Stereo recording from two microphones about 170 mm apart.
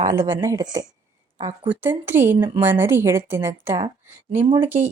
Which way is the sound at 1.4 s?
35° right (ahead or behind).